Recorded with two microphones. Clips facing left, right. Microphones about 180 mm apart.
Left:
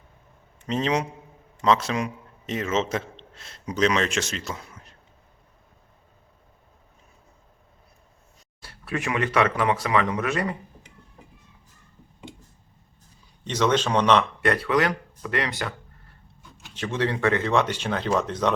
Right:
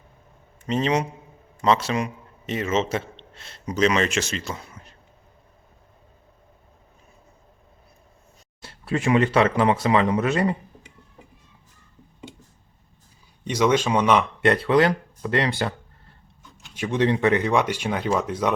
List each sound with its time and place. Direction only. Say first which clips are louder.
0.7 s a man's voice: right 2 dB; centre (ahead or behind)
8.6 s speech: right 5 dB; 30° right (ahead or behind)
13.4 s speech: right 2 dB; 10° right (ahead or behind)
14.4 s speech: right 4 dB; 25° right (ahead or behind)
16.7 s speech: right 4 dB; 15° right (ahead or behind)